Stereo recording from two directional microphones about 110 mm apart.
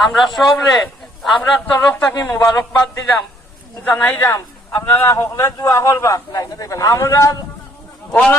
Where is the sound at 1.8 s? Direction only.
15° left (ahead or behind).